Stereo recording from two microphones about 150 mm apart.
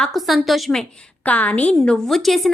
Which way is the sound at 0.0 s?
Centre (ahead or behind).